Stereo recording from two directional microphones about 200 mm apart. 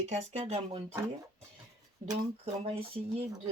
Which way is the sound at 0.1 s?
30° right (ahead or behind).